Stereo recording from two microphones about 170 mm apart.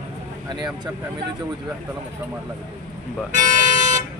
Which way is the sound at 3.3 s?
50° right (ahead or behind).